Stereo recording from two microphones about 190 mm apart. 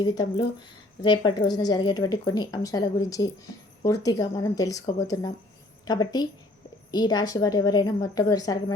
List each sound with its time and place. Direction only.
0.0 s a woman's voice: 25° left (ahead or behind)